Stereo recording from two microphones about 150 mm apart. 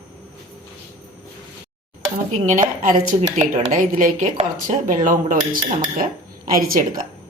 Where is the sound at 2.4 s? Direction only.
55° right (ahead or behind).